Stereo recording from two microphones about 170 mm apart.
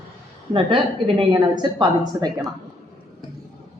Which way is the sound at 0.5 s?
30° right (ahead or behind).